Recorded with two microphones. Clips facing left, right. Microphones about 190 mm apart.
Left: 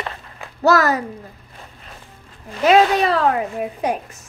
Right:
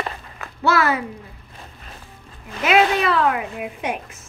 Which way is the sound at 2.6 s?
35° left (ahead or behind).